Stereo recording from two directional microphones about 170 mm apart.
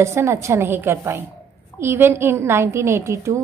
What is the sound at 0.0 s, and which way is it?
A woman's voice, 15° right (ahead or behind).